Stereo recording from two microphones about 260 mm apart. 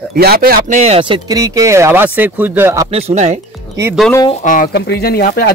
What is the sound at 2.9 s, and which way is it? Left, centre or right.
Speech, right.